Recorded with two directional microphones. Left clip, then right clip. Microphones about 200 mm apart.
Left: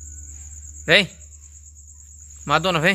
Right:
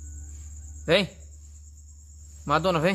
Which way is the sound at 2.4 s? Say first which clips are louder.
Left 4 dB; 15° left (ahead or behind).